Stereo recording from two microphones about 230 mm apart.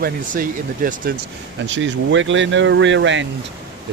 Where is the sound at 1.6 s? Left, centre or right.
Right.